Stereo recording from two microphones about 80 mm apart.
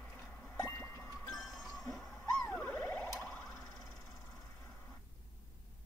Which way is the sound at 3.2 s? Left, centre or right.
Centre.